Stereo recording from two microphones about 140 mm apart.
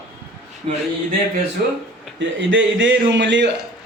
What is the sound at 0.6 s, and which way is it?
Speech, 50° right (ahead or behind).